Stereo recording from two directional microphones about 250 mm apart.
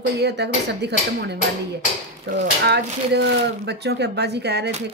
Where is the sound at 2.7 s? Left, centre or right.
Right.